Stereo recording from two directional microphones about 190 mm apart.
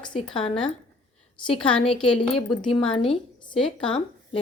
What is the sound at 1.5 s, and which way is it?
Speech, 5° left (ahead or behind).